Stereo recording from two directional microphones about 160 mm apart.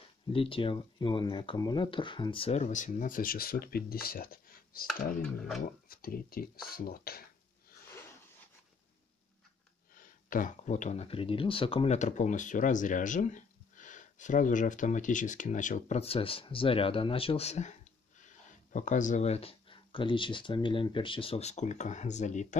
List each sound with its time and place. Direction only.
0.3 s speech: 35° left (ahead or behind); by 4.8 s 65° left (ahead or behind)
4.8 s speech: 5° left (ahead or behind)
5.9 s speech: 65° left (ahead or behind)
9.9 s speech: 55° left (ahead or behind)